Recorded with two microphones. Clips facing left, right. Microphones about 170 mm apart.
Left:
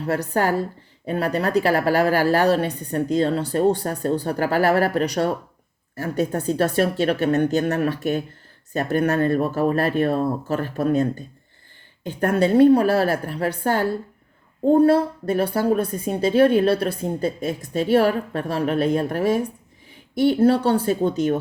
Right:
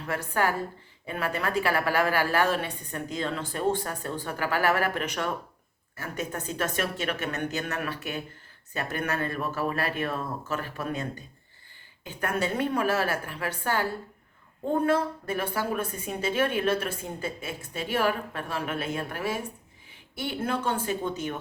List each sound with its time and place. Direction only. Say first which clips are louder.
0.0 s a woman's voice: left 6 dB; 40° left (ahead or behind)